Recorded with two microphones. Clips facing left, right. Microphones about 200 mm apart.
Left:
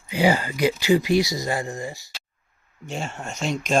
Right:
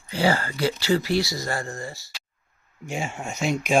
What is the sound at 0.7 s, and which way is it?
Speech, 15° left (ahead or behind).